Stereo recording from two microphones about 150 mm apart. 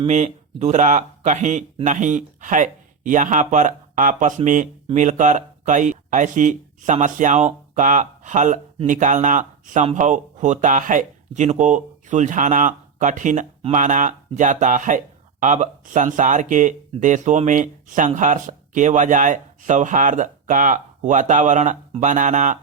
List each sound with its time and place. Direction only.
0.1 s speech: 50° right (ahead or behind)